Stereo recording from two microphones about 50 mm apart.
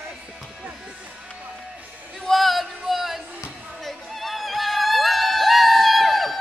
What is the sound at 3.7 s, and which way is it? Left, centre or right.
Music, centre.